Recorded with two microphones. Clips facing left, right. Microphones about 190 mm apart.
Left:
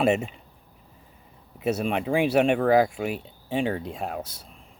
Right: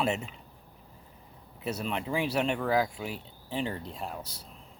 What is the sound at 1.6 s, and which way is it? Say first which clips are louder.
Speech: left 8 dB; 65° left (ahead or behind).